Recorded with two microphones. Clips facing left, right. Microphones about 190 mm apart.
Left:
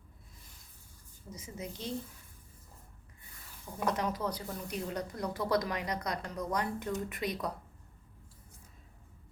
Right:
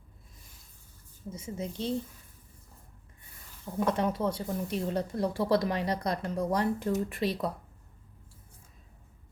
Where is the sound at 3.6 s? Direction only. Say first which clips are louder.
Right 5 dB; 25° right (ahead or behind).